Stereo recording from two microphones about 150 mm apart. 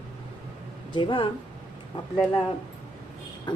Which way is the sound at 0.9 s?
35° left (ahead or behind).